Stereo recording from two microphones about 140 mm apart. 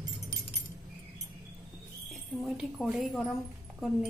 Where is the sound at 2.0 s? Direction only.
Centre (ahead or behind).